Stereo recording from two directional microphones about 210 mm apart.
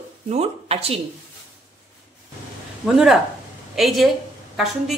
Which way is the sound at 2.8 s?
Centre (ahead or behind).